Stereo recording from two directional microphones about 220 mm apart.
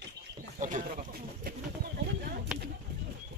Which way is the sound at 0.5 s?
35° right (ahead or behind).